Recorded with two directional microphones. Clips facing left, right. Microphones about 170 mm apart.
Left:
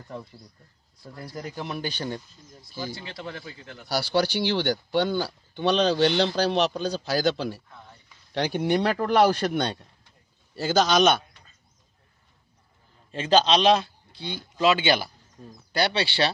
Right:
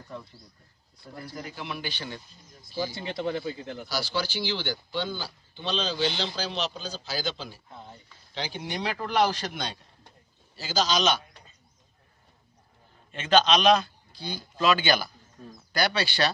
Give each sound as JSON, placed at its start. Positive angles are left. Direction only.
{"t": 1.4, "sound": "speech", "side_deg": 40}
{"t": 2.9, "sound": "speech", "side_deg": -25}
{"t": 3.9, "sound": "speech", "side_deg": 60}
{"t": 7.7, "sound": "a sound", "side_deg": -25}
{"t": 8.3, "sound": "speech", "side_deg": 60}
{"t": 13.1, "sound": "a man's voice", "side_deg": 35}